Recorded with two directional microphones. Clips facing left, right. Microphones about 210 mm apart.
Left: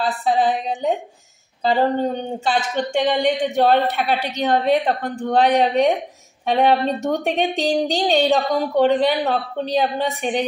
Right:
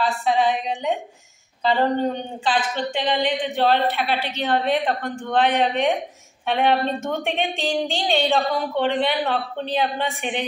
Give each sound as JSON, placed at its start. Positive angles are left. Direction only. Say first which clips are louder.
{"t": 0.0, "sound": "a woman's voice", "louder": "left 1 dB", "side_deg": 35}